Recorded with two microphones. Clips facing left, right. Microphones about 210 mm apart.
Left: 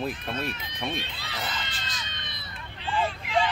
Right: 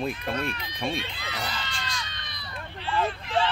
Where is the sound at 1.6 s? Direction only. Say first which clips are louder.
Right 3 dB; 20° left (ahead or behind).